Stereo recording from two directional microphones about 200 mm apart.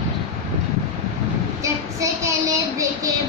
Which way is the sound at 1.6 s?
15° right (ahead or behind).